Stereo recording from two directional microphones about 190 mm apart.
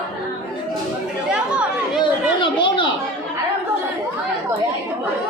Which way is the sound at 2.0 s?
25° left (ahead or behind).